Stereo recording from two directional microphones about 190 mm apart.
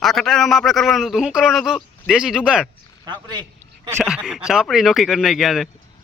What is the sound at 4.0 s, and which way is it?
A man's voice, 5° right (ahead or behind).